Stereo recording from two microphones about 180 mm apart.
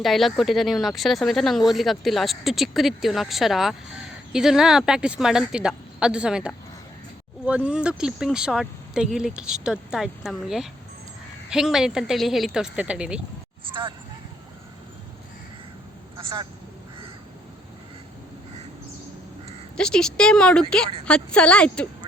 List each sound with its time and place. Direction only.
0.0 s speech: centre (ahead or behind)
13.7 s speech: 25° right (ahead or behind)
19.7 s speech: 5° left (ahead or behind)